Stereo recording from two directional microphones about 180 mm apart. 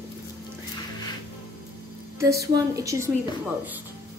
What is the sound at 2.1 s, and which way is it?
Speech, 15° right (ahead or behind).